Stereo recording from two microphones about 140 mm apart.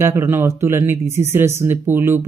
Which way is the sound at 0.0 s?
20° right (ahead or behind).